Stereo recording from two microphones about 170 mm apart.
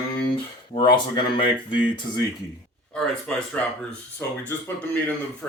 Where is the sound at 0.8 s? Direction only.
30° left (ahead or behind).